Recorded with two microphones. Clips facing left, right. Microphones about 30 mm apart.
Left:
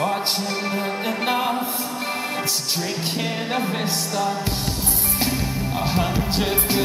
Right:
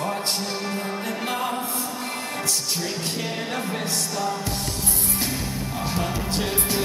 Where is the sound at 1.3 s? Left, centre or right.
Left.